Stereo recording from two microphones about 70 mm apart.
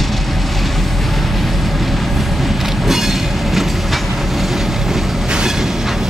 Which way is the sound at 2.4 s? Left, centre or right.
Centre.